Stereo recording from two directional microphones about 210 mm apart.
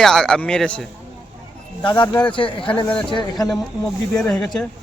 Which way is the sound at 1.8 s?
20° left (ahead or behind).